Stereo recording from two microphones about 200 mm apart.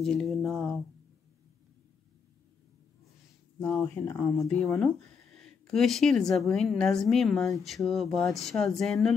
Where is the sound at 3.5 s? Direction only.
10° left (ahead or behind).